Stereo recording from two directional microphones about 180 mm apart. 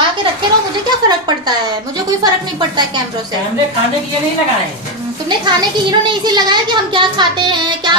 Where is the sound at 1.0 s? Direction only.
25° right (ahead or behind).